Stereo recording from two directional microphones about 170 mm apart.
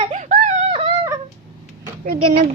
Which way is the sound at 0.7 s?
30° right (ahead or behind).